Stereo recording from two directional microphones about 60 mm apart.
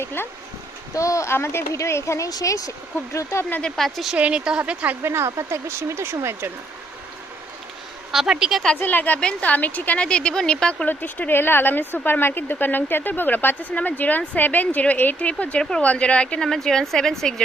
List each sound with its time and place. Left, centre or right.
0.0 s speech: left
0.9 s speech: left
1.3 s speech: left
1.7 s speech: left
3.8 s speech: centre
4.2 s speech: centre
5.0 s speech: right
8.1 s speech: centre
8.8 s speech: left; by 10.8 s centre
10.8 s speech: left
15.5 s speech: centre
15.8 s speech: left